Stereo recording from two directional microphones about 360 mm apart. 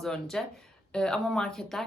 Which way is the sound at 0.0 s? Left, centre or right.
Centre.